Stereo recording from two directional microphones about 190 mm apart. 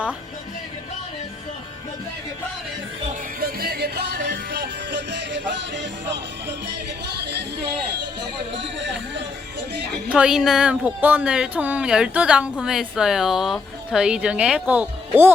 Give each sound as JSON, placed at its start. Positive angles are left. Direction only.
{"t": 3.4, "sound": "music", "side_deg": -55}
{"t": 8.5, "sound": "a sound", "side_deg": -70}
{"t": 10.1, "sound": "speech", "side_deg": -5}